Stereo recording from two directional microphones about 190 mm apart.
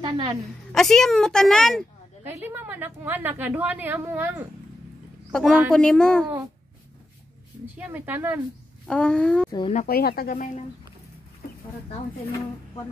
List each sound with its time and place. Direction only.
0.0 s a woman's voice: 25° right (ahead or behind)
0.7 s a woman's voice: centre (ahead or behind)
2.2 s a woman's voice: 10° right (ahead or behind)
5.3 s a woman's voice: centre (ahead or behind)
7.6 s a woman's voice: 10° right (ahead or behind)
8.8 s a woman's voice: 5° left (ahead or behind)
9.5 s speech: 25° left (ahead or behind)
9.8 s speech: 55° left (ahead or behind)